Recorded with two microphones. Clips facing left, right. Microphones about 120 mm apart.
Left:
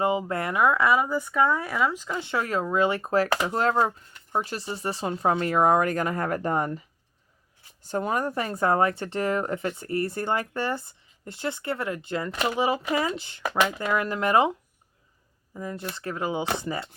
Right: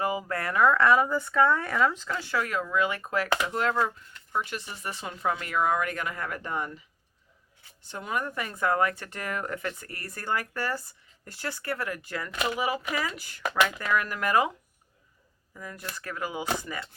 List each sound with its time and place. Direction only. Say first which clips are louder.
0.0 s speech: left 4 dB; 25° left (ahead or behind)
15.5 s speech: left 6 dB; 25° left (ahead or behind)